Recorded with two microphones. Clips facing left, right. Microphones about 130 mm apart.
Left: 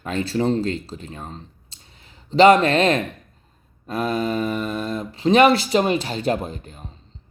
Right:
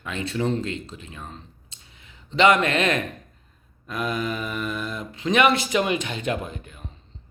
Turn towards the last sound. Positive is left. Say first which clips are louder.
# left 4 dB
turn(degrees=35)  # may be behind; listen again after turning